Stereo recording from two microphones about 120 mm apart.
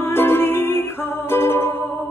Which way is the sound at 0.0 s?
20° left (ahead or behind).